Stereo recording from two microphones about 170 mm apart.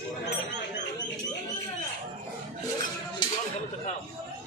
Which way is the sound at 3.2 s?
25° left (ahead or behind).